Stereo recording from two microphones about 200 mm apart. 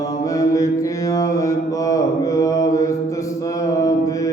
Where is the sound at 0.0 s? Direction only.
15° left (ahead or behind).